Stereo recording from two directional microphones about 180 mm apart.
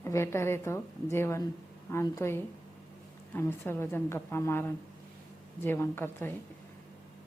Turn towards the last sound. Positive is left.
turn(degrees=10)  # may be behind; listen again after turning